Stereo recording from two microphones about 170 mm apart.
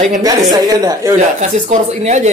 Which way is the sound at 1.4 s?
45° right (ahead or behind).